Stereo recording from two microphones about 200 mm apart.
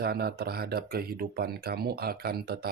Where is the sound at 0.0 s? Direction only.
50° right (ahead or behind).